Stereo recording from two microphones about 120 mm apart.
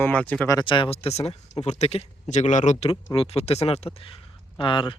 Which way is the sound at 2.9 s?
50° left (ahead or behind).